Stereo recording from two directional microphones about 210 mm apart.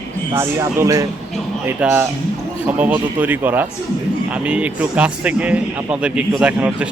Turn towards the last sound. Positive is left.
turn(degrees=-5)  # may be behind; listen again after turning